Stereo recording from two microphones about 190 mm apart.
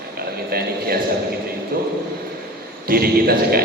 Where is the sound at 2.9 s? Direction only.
55° right (ahead or behind).